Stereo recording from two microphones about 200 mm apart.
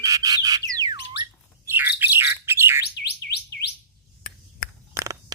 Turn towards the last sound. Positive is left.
turn(degrees=-15)  # may be behind; listen again after turning